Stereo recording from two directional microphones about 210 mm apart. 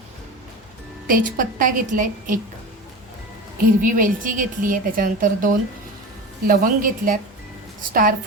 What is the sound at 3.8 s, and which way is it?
A woman's voice, 40° right (ahead or behind).